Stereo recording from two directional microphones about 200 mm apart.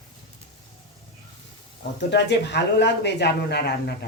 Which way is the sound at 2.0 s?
60° left (ahead or behind).